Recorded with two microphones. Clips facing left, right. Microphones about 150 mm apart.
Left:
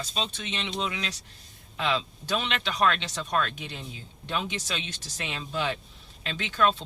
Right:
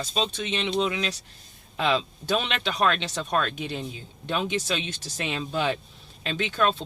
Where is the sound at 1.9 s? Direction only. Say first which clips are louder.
Right 4 dB; 25° right (ahead or behind).